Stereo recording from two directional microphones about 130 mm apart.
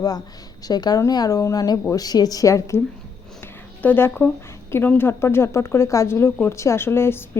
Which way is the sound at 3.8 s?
15° left (ahead or behind).